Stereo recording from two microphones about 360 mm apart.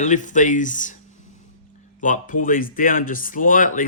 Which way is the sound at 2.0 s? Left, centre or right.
Left.